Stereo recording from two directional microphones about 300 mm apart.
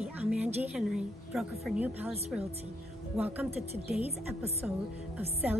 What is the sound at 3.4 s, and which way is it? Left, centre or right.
Speech, right.